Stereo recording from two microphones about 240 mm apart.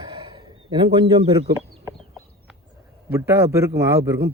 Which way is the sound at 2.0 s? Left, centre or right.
Centre.